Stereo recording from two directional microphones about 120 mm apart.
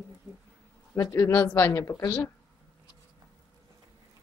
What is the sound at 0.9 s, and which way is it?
Speech, 25° left (ahead or behind).